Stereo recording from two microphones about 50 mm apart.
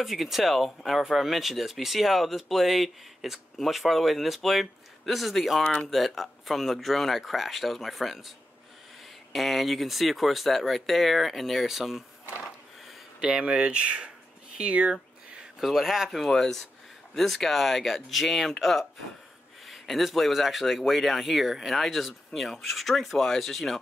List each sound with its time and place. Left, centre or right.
0.0 s speech: centre
5.6 s speech: centre
5.9 s speech: centre
9.3 s speech: centre
13.2 s speech: centre
15.6 s speech: centre